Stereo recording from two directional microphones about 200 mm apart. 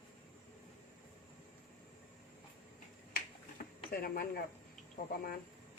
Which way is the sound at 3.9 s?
50° left (ahead or behind).